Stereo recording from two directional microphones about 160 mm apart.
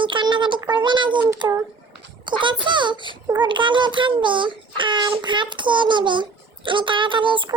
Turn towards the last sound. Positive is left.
turn(degrees=-30)  # may be behind; listen again after turning